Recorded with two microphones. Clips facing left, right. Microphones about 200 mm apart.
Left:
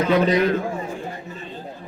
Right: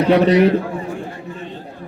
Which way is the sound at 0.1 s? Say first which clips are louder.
Right 6 dB; 70° right (ahead or behind).